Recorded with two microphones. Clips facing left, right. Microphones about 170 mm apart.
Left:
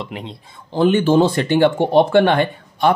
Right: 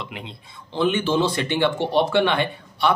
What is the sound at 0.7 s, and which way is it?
A man's voice, 45° left (ahead or behind).